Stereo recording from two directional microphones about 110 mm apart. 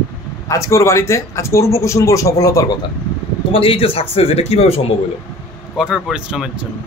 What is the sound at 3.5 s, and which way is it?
A man's voice, 60° left (ahead or behind).